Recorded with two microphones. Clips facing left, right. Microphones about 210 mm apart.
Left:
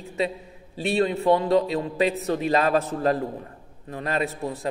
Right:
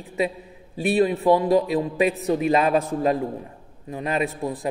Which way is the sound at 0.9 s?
15° right (ahead or behind).